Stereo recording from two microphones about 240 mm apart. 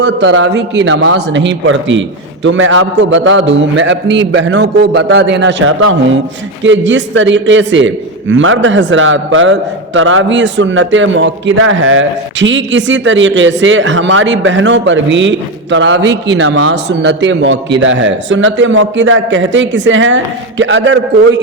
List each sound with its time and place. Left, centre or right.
0.0 s a man's voice: right